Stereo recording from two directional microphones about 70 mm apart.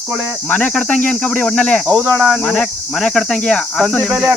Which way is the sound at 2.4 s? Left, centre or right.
Centre.